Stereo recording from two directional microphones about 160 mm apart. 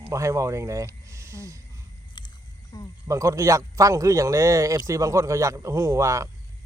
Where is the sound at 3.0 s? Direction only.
20° right (ahead or behind).